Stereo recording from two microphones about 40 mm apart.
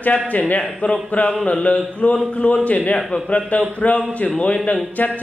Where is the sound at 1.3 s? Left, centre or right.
Centre.